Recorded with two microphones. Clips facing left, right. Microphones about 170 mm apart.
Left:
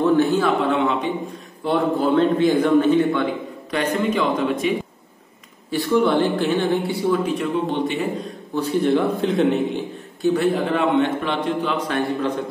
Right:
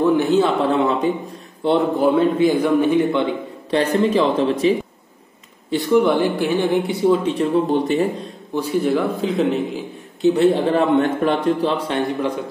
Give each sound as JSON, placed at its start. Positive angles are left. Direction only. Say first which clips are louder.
{"t": 0.0, "sound": "a sound", "louder": "right 2 dB", "side_deg": -15}
{"t": 0.7, "sound": "a man's voice", "louder": "right 3 dB", "side_deg": -35}
{"t": 1.6, "sound": "a man's voice", "louder": "right 3 dB", "side_deg": -20}
{"t": 2.1, "sound": "a woman's voice", "louder": "right 1 dB", "side_deg": -10}
{"t": 3.7, "sound": "a man's voice", "louder": "right 4 dB", "side_deg": -35}
{"t": 5.7, "sound": "a woman's voice", "louder": "right 2 dB", "side_deg": -15}
{"t": 7.7, "sound": "a man's voice", "louder": "right 5 dB", "side_deg": -40}
{"t": 8.5, "sound": "a man's voice", "louder": "even", "side_deg": -5}
{"t": 10.2, "sound": "a man's voice", "louder": "right 4 dB", "side_deg": -25}
{"t": 10.7, "sound": "a man's voice", "louder": "right 2 dB", "side_deg": -40}
{"t": 11.9, "sound": "a woman's voice", "louder": "right 1 dB", "side_deg": -15}